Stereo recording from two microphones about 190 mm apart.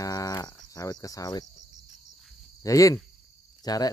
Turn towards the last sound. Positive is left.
turn(degrees=20)  # may be behind; listen again after turning